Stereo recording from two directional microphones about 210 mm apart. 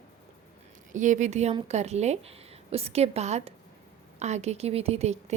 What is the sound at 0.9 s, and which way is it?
A woman's voice, 35° right (ahead or behind).